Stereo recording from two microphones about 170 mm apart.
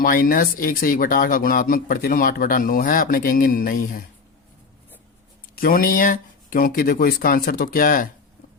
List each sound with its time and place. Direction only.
0.0 s speech: 55° left (ahead or behind)
5.5 s speech: 55° left (ahead or behind)